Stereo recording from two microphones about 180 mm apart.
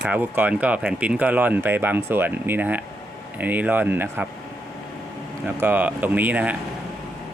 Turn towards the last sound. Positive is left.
turn(degrees=-10)  # may be behind; listen again after turning